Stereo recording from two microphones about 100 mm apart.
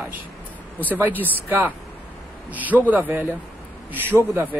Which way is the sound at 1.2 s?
20° right (ahead or behind).